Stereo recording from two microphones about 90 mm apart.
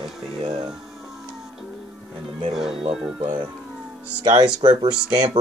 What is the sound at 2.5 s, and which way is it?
Speech, 5° right (ahead or behind).